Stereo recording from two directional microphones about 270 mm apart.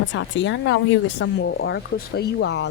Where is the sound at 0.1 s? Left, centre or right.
Left.